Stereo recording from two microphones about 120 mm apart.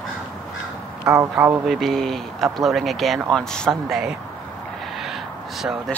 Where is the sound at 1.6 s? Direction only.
Centre (ahead or behind).